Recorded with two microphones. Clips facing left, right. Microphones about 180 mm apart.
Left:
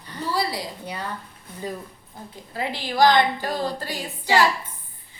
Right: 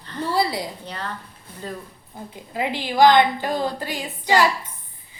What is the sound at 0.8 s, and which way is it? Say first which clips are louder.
Speech: left 1 dB; 10° left (ahead or behind).